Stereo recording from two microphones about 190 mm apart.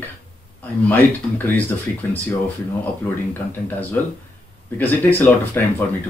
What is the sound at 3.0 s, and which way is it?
Speech, 10° left (ahead or behind).